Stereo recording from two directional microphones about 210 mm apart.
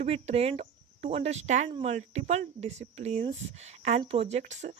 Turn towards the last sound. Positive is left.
turn(degrees=-35)  # may be behind; listen again after turning